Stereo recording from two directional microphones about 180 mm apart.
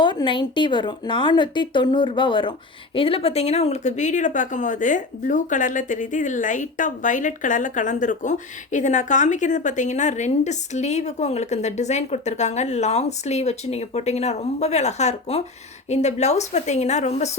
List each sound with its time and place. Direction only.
0.0 s speech: 25° left (ahead or behind)